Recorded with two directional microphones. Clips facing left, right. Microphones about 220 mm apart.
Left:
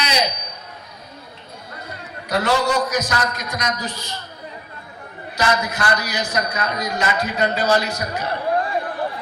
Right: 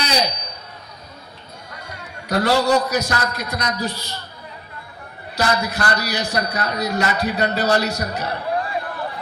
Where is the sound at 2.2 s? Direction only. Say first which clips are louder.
Right 2 dB; 35° right (ahead or behind).